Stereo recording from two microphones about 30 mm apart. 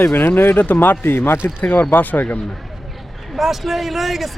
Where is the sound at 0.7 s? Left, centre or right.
Left.